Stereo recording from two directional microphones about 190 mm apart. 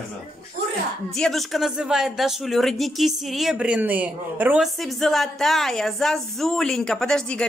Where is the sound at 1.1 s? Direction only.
Centre (ahead or behind).